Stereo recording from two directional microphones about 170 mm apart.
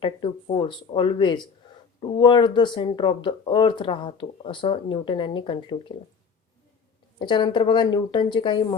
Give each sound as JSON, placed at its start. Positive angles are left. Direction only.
{"t": 0.0, "sound": "speech", "side_deg": 30}
{"t": 7.2, "sound": "speech", "side_deg": 30}